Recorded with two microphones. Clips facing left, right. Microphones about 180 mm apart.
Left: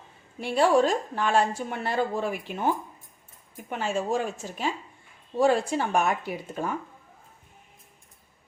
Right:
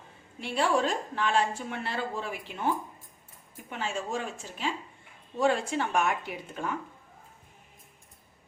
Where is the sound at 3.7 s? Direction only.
45° left (ahead or behind).